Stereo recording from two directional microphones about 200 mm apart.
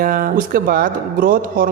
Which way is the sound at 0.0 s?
45° right (ahead or behind).